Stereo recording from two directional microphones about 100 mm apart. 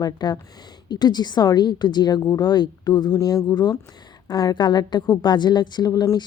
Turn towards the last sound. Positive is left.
turn(degrees=40)  # may be behind; listen again after turning